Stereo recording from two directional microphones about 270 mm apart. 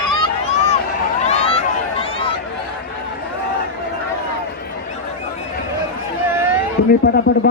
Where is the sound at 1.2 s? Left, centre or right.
Left.